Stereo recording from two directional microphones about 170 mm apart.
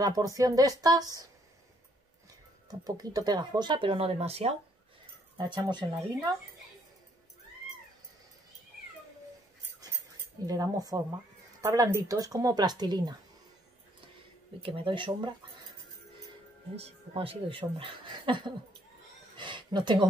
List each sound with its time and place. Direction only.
0.0 s speech: 20° right (ahead or behind)
2.7 s speech: 20° right (ahead or behind); by 4.6 s 35° right (ahead or behind)
5.4 s speech: 25° right (ahead or behind)
10.4 s speech: 20° right (ahead or behind)
14.6 s speech: 30° right (ahead or behind)
16.7 s speech: 35° right (ahead or behind)
19.3 s a sound: 30° right (ahead or behind)